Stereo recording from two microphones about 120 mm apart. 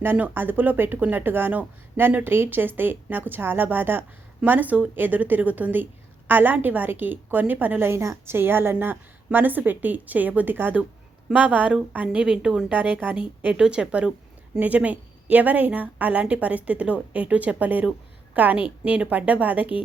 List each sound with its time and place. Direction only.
0.0 s speech: 15° right (ahead or behind)